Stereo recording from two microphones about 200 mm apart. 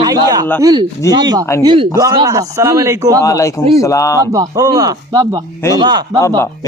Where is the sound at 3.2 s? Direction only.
15° left (ahead or behind).